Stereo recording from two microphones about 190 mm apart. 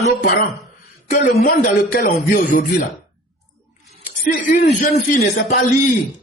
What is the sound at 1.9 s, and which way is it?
Speech, 45° left (ahead or behind).